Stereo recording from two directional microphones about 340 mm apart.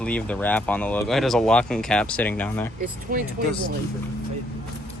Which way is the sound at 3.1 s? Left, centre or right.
Right.